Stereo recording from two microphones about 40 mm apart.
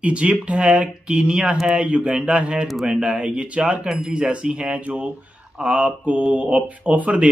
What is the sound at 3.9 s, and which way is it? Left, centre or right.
Speech, centre.